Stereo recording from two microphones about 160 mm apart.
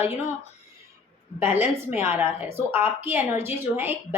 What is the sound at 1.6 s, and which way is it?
A woman's voice, 15° right (ahead or behind).